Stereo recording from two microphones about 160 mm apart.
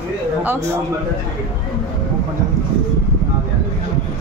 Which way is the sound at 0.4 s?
15° right (ahead or behind).